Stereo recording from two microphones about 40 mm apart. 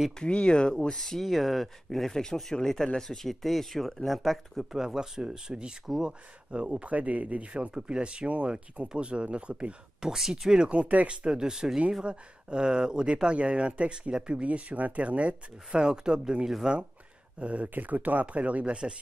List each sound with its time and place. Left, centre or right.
0.2 s speech: left; by 4.6 s centre
4.7 s speech: centre; by 7.4 s right
7.5 s speech: right
9.9 s speech: centre
10.5 s speech: right
11.1 s speech: right
15.8 s speech: centre
17.4 s speech: right
17.7 s speech: right